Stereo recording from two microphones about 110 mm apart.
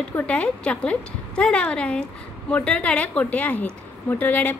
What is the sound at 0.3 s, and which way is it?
A woman's voice, 10° left (ahead or behind).